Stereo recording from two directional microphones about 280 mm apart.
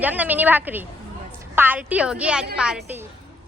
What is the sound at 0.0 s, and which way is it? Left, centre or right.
A woman's voice, centre.